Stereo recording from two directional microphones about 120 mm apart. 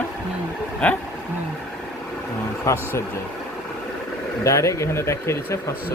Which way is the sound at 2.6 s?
20° left (ahead or behind).